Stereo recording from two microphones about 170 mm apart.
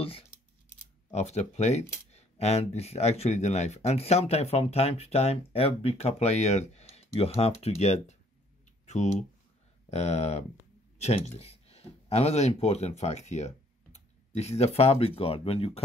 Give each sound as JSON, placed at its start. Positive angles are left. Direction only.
{"t": 1.1, "sound": "speech", "side_deg": 40}